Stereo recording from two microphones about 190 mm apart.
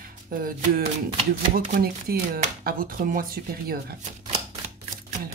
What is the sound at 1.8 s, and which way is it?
Speech, 50° right (ahead or behind).